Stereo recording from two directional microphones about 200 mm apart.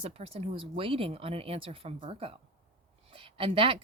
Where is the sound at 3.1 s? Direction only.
25° right (ahead or behind).